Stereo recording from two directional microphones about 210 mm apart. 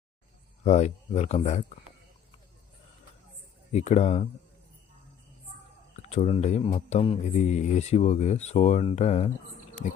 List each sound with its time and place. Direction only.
0.6 s speech: 30° left (ahead or behind)
3.7 s speech: 35° left (ahead or behind)
6.0 s speech: 30° left (ahead or behind)